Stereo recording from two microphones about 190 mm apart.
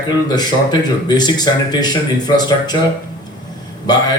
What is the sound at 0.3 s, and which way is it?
Speech, 20° left (ahead or behind).